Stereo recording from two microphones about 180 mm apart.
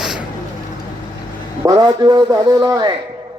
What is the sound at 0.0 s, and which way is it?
Vehicle, centre (ahead or behind).